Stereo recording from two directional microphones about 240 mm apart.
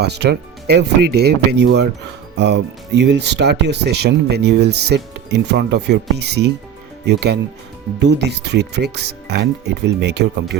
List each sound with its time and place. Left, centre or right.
0.0 s speech: right